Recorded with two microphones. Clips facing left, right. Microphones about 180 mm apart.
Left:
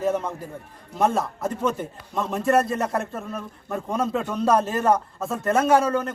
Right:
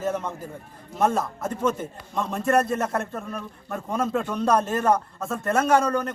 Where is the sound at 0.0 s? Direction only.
Centre (ahead or behind).